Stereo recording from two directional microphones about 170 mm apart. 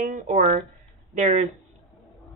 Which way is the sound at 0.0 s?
50° right (ahead or behind).